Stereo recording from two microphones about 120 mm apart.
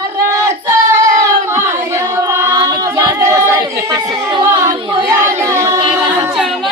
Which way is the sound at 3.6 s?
35° right (ahead or behind).